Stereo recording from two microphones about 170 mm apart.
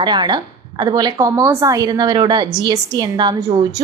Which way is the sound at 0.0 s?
25° right (ahead or behind).